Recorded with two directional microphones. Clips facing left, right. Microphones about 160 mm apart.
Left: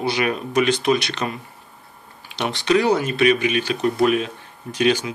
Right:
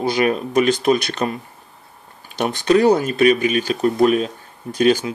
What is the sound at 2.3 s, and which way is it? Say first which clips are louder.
Speech: right 3 dB; 45° right (ahead or behind).